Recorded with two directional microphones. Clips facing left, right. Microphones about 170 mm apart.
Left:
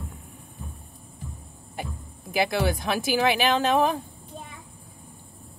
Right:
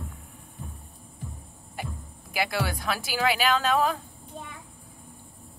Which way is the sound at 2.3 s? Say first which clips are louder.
Left 5 dB; 25° left (ahead or behind).